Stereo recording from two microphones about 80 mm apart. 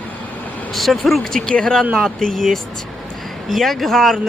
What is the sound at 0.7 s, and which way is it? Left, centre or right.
Speech, centre.